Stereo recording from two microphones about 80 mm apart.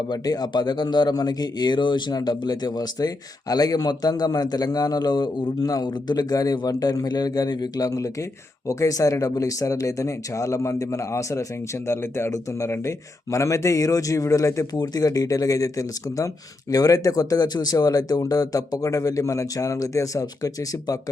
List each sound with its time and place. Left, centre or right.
0.1 s a man's voice: left
14.7 s speech: left